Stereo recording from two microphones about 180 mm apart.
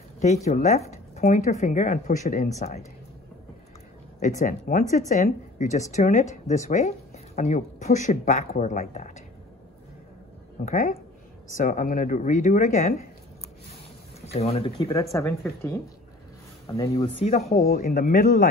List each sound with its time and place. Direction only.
0.2 s speech: 40° left (ahead or behind)
4.2 s speech: 45° left (ahead or behind)
10.6 s speech: 50° left (ahead or behind)
14.2 s speech: 35° left (ahead or behind)
14.8 s speech: 20° left (ahead or behind)
17.2 s speech: 35° left (ahead or behind)
17.6 s speech: 55° left (ahead or behind)